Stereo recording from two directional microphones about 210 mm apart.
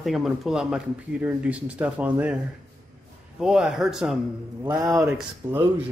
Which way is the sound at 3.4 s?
5° right (ahead or behind).